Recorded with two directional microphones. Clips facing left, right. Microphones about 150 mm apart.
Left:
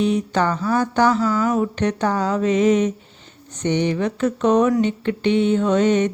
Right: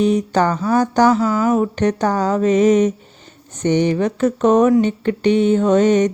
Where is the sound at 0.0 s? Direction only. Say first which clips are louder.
Right 3 dB; 45° right (ahead or behind).